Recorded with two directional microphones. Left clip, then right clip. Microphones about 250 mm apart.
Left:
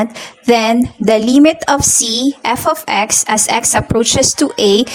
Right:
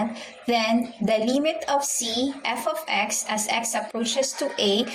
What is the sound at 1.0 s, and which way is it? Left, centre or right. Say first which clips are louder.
Speech: left 13 dB; left.